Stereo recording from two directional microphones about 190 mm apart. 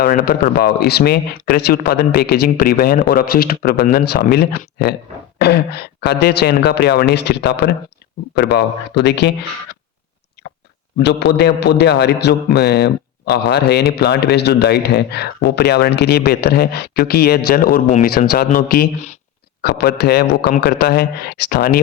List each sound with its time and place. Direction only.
0.4 s speech: 55° left (ahead or behind)
10.4 s chewing: 65° left (ahead or behind)
11.0 s speech: 65° left (ahead or behind)